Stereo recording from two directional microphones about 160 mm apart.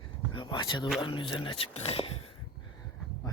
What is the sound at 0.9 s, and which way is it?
Speech, 30° left (ahead or behind).